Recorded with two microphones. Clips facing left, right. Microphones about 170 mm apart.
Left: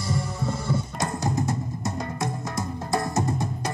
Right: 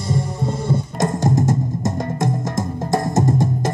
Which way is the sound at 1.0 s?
45° right (ahead or behind).